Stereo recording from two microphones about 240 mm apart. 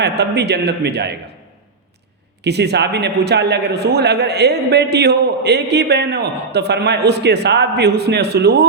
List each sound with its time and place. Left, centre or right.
0.0 s a man's voice: right
2.4 s a man's voice: right